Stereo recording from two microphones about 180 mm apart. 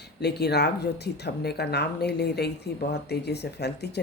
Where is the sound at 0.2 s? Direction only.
65° left (ahead or behind).